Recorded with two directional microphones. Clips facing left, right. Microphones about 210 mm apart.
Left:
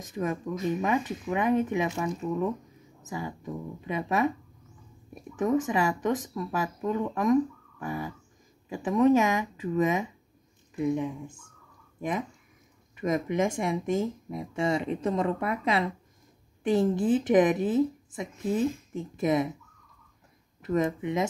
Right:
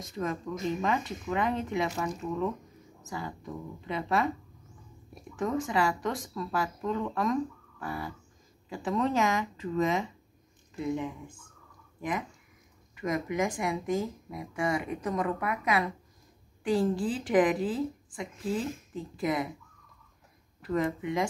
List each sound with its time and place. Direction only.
0.0 s speech: 15° left (ahead or behind)
5.4 s speech: 20° left (ahead or behind)
12.9 s speech: 20° left (ahead or behind)
20.6 s speech: 20° left (ahead or behind)